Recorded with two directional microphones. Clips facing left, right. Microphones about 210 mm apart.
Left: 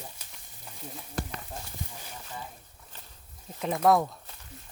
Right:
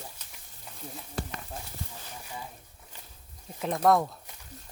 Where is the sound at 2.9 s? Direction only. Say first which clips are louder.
Even; 10° right (ahead or behind).